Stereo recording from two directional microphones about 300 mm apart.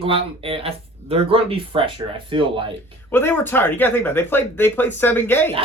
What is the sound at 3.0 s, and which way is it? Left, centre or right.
Speech, centre.